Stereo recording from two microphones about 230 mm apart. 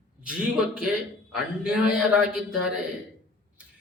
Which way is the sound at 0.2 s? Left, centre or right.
Centre.